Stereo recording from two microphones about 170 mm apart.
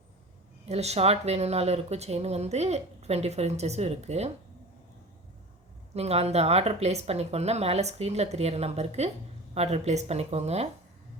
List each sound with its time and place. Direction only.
0.6 s a woman's voice: 40° right (ahead or behind)
5.9 s a woman's voice: 40° right (ahead or behind)